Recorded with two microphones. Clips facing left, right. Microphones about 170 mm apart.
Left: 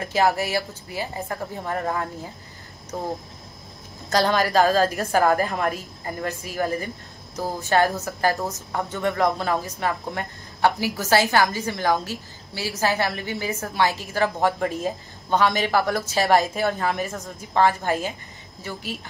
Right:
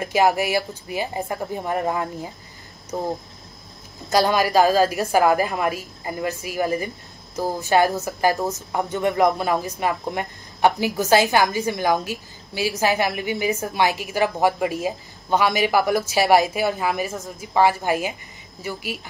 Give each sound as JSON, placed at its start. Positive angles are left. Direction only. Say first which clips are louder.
{"t": 0.0, "sound": "a woman's voice", "louder": "right 2 dB", "side_deg": -15}
{"t": 4.1, "sound": "a woman's voice", "louder": "right 2 dB", "side_deg": -10}